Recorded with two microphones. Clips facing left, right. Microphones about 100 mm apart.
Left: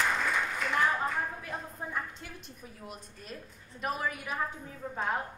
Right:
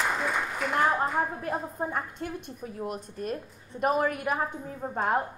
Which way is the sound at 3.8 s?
50° right (ahead or behind).